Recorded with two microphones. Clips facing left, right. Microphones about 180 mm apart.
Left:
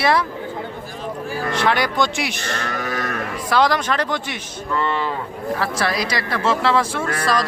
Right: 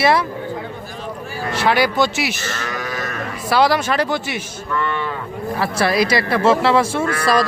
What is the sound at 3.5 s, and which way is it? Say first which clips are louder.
Speech: right 2 dB; 10° right (ahead or behind).